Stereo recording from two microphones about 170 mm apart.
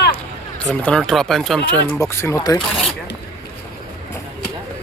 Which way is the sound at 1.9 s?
15° left (ahead or behind).